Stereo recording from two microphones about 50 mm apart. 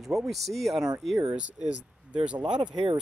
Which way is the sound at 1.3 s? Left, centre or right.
Right.